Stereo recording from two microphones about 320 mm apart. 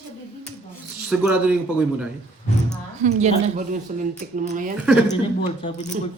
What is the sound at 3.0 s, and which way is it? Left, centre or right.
Speech, right.